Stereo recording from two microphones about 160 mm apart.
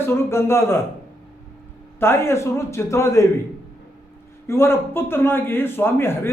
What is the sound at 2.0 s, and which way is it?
A man's voice, 15° left (ahead or behind).